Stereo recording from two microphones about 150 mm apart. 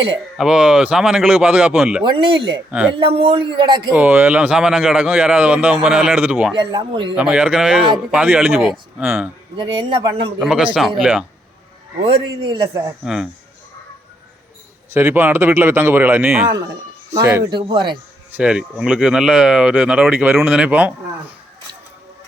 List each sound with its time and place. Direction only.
0.3 s speech: 5° right (ahead or behind)
2.2 s a man's voice: 35° right (ahead or behind)
3.9 s speech: 10° right (ahead or behind)
6.6 s a man's voice: 30° right (ahead or behind)
7.2 s speech: 5° right (ahead or behind)
9.6 s a man's voice: 30° right (ahead or behind)
10.4 s speech: 5° right (ahead or behind)
12.0 s a man's voice: 35° right (ahead or behind)
14.9 s speech: 15° right (ahead or behind)
17.5 s a man's voice: 30° right (ahead or behind)
18.3 s speech: 5° right (ahead or behind)